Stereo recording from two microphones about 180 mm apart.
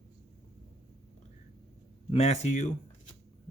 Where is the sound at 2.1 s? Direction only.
35° left (ahead or behind).